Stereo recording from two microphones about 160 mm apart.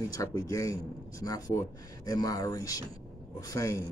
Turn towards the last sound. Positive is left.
turn(degrees=20)  # may be behind; listen again after turning